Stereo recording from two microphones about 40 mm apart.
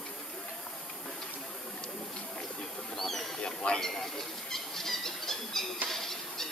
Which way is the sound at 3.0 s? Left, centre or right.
Centre.